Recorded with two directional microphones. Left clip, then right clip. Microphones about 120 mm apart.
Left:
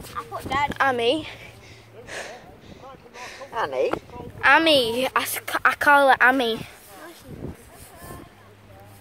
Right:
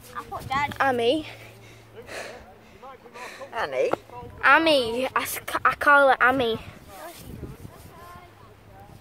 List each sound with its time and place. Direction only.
0.2 s speech: 10° right (ahead or behind)
0.7 s speech: 25° right (ahead or behind)
3.2 s a sound: 35° right (ahead or behind)
3.5 s speech: 25° left (ahead or behind)
3.9 s a sound: 15° right (ahead or behind)
4.6 s a woman's voice: 5° left (ahead or behind)